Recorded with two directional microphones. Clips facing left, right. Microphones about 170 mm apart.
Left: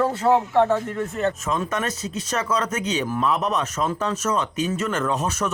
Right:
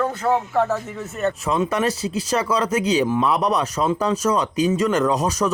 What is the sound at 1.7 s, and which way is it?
Speech, 30° right (ahead or behind).